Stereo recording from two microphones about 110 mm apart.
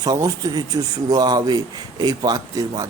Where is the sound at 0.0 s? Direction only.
35° right (ahead or behind).